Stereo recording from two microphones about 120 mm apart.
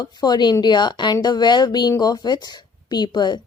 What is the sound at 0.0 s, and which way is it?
Speech, 35° left (ahead or behind).